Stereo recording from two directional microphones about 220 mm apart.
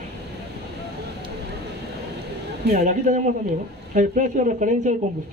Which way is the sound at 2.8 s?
35° right (ahead or behind).